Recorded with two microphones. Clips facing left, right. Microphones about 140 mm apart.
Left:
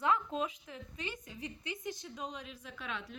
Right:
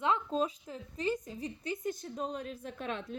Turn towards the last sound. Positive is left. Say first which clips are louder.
# right 5 dB
turn(degrees=-45)  # may be behind; listen again after turning